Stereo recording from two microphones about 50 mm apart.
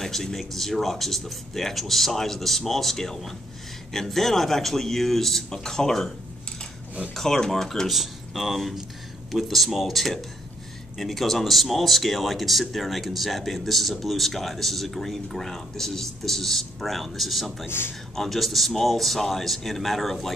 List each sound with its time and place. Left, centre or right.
0.0 s speech: centre
7.2 s speech: centre
17.6 s speech: left
18.1 s speech: centre